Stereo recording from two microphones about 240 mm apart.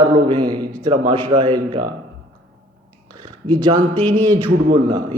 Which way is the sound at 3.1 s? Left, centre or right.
Centre.